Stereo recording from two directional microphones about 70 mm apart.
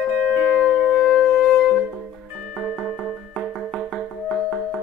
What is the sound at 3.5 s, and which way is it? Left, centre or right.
Music, centre.